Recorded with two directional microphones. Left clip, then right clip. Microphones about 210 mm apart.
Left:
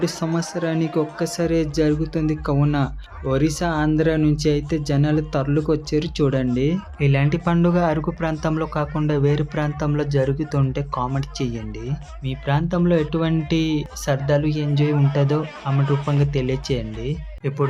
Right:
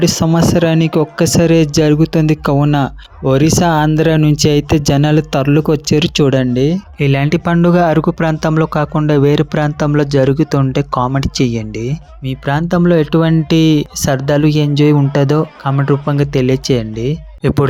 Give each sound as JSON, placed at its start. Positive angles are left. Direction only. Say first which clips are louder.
{"t": 0.0, "sound": "speech", "louder": "right 11 dB", "side_deg": -40}
{"t": 17.4, "sound": "speech", "louder": "right 9 dB", "side_deg": -45}